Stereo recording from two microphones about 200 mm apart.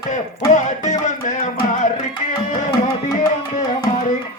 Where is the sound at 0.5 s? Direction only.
40° left (ahead or behind).